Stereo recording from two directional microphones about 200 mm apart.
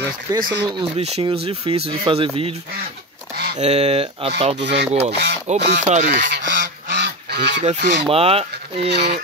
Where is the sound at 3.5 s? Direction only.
30° right (ahead or behind).